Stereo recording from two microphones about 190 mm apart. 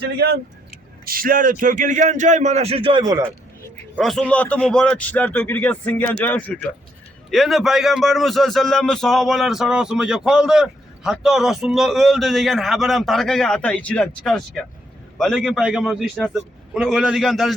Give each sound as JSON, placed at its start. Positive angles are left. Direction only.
{"t": 0.0, "sound": "speech", "side_deg": -60}
{"t": 3.9, "sound": "a man's voice", "side_deg": 0}